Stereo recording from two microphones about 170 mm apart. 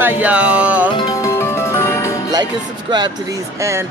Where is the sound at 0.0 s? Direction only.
10° right (ahead or behind).